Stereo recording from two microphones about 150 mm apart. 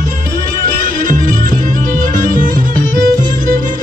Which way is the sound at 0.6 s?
60° right (ahead or behind).